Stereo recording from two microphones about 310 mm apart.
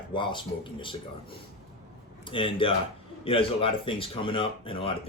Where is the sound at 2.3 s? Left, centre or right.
Centre.